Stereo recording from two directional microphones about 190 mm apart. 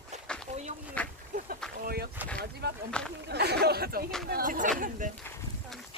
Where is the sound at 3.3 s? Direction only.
60° right (ahead or behind).